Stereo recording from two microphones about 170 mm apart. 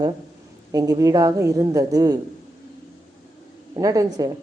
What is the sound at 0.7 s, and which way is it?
A woman's voice, 20° right (ahead or behind).